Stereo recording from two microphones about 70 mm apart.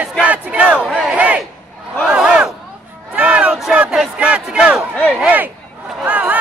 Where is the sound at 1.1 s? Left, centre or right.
Centre.